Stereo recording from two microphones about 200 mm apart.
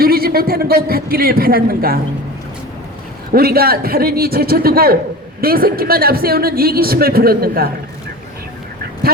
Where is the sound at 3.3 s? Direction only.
50° right (ahead or behind).